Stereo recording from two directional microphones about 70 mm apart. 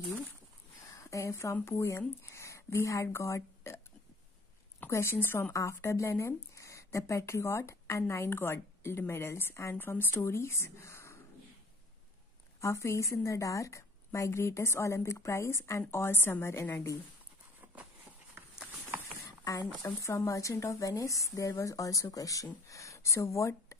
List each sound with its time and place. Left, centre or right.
0.8 s a woman's voice: left
5.5 s speech: left
12.5 s a woman's voice: left
19.4 s a woman's voice: left